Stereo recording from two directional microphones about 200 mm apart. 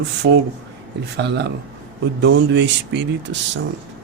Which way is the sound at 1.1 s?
55° right (ahead or behind).